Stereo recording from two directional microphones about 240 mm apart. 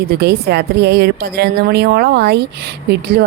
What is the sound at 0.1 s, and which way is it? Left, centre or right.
Speech, right.